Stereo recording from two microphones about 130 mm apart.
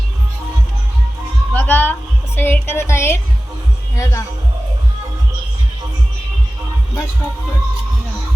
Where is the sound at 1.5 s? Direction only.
15° left (ahead or behind).